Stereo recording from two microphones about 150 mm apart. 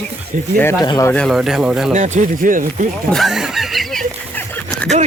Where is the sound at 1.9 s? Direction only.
55° right (ahead or behind).